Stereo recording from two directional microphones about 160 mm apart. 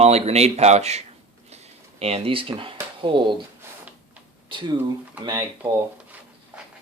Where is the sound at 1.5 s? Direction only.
40° right (ahead or behind).